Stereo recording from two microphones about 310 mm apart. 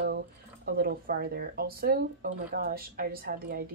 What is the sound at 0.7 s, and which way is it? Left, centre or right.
Speech, right.